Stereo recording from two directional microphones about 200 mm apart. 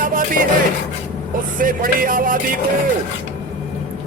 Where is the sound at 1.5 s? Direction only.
45° right (ahead or behind).